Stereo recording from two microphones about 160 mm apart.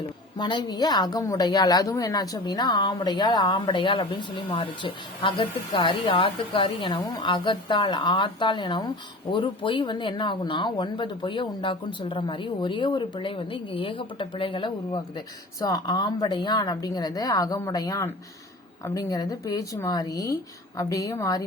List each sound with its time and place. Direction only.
0.3 s a woman's voice: 30° left (ahead or behind)